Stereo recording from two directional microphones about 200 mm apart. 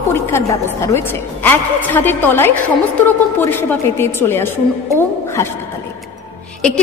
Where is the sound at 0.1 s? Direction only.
15° left (ahead or behind).